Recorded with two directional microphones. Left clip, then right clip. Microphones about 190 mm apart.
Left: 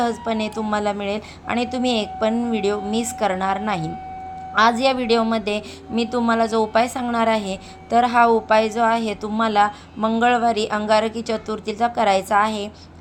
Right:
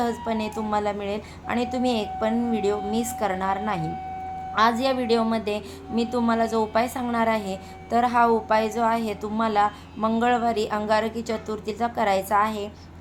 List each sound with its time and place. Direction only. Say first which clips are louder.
0.0 s a woman's voice: left 4 dB; 15° left (ahead or behind)